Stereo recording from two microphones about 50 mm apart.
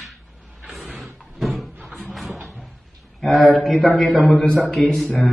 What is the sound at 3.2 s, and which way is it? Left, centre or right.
A man's voice, centre.